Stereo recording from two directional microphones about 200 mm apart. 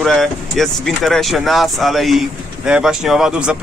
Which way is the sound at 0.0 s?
Centre (ahead or behind).